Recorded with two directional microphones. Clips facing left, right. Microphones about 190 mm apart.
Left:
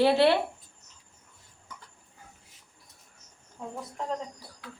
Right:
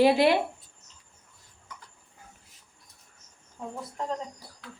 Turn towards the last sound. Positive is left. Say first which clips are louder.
# right 1 dB
turn(degrees=0)  # may be behind; listen again after turning